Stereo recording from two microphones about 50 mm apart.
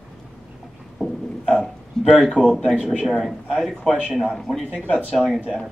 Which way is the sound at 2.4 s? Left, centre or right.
Centre.